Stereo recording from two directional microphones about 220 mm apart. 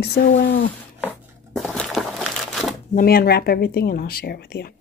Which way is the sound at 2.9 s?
40° left (ahead or behind).